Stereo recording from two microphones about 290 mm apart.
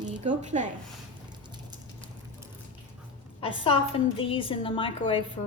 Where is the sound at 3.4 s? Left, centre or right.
Centre.